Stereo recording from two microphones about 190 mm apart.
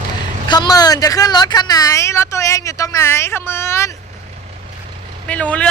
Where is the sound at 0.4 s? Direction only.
25° left (ahead or behind).